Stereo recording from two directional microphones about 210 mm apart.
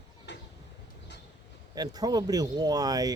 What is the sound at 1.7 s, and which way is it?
Speech, 20° right (ahead or behind).